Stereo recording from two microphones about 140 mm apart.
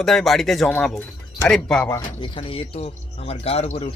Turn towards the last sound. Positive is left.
turn(degrees=45)  # may be behind; listen again after turning